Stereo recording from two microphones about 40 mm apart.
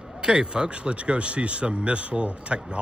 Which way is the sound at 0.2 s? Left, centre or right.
Centre.